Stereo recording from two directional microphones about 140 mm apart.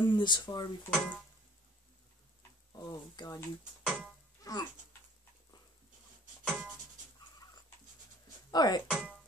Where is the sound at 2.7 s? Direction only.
30° left (ahead or behind).